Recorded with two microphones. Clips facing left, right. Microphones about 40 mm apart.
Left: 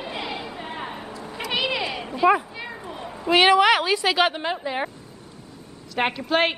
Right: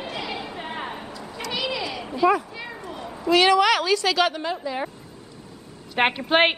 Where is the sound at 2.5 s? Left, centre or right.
Centre.